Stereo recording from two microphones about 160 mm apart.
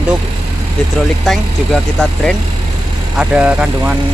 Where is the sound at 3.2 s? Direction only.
5° right (ahead or behind).